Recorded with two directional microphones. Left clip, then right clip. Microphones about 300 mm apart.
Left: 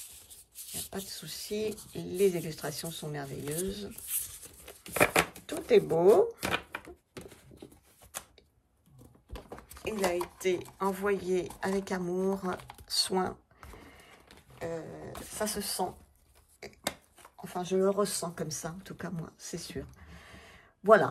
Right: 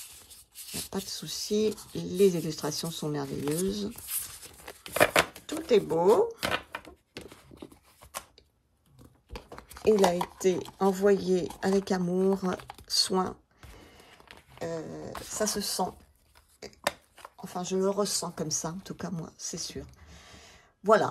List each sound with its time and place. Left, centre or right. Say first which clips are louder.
0.3 s speech: right 5 dB; centre
4.2 s tearing: right 3 dB; centre
7.2 s a sound: right 3 dB; right
9.6 s speech: right 10 dB; centre
13.7 s printer: right 2 dB; centre
14.6 s speech: right 3 dB; centre
16.5 s a sound: right 5 dB; centre
17.4 s speech: left 1 dB; centre